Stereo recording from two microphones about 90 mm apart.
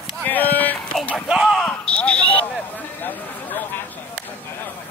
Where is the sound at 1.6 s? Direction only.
15° left (ahead or behind).